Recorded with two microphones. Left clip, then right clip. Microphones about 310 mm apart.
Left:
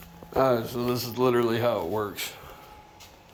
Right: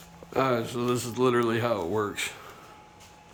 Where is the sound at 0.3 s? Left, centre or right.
Centre.